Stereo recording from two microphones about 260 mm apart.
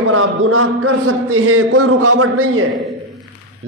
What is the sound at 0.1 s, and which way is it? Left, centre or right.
A man's voice, right.